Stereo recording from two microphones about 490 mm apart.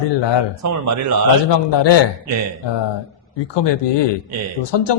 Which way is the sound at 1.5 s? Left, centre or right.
Left.